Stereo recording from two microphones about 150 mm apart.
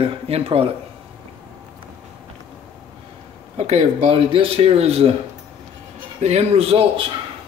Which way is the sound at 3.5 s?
45° right (ahead or behind).